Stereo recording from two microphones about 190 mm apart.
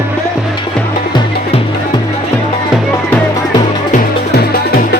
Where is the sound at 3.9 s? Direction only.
50° left (ahead or behind).